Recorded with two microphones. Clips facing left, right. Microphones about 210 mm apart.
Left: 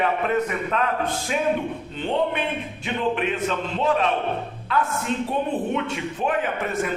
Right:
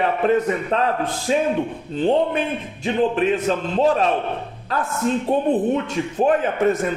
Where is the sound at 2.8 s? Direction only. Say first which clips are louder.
Right 6 dB; 35° right (ahead or behind).